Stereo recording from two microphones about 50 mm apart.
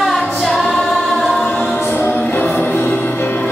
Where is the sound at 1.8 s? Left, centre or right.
Left.